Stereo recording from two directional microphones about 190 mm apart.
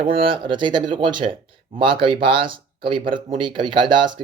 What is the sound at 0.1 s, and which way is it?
Speech, 25° right (ahead or behind).